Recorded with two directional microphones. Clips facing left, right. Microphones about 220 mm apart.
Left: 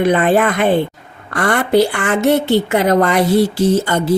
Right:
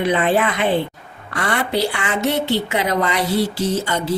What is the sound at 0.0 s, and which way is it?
Speech, 50° left (ahead or behind).